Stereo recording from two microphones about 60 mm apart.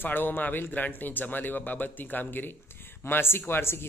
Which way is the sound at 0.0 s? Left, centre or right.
Left.